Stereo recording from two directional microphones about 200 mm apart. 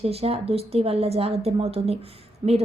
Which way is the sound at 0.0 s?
30° right (ahead or behind).